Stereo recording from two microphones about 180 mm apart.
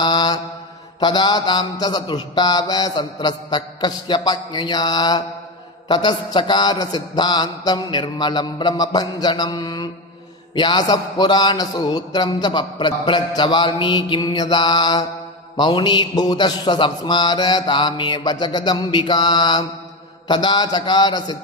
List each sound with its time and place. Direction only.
0.0 s mantra: 25° left (ahead or behind)
0.9 s a man's voice: 25° left (ahead or behind)